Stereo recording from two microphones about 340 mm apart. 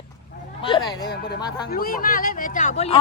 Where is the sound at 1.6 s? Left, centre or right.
Left.